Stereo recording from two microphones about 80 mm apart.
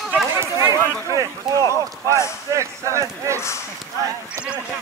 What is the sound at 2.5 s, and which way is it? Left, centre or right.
Speech, right.